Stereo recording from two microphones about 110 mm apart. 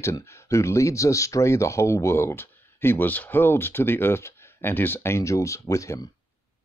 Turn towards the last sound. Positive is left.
turn(degrees=30)  # may be behind; listen again after turning